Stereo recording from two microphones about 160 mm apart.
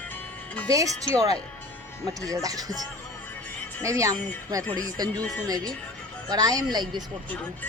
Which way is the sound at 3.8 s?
20° right (ahead or behind).